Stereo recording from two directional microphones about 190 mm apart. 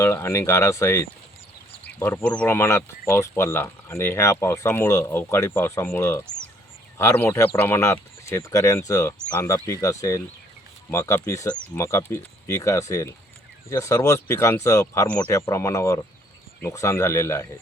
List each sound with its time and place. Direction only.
0.0 s speech: 15° left (ahead or behind)